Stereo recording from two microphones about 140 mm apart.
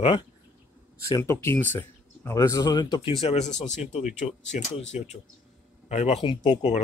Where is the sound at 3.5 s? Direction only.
60° left (ahead or behind).